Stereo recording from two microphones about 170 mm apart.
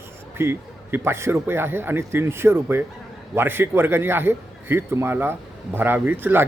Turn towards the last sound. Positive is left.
turn(degrees=-10)  # may be behind; listen again after turning